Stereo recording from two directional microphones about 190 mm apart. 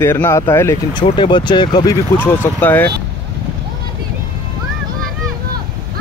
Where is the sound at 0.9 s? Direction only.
25° left (ahead or behind).